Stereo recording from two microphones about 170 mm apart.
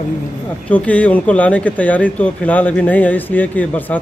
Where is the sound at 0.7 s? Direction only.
10° left (ahead or behind).